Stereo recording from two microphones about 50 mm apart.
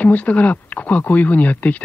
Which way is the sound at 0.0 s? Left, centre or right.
Left.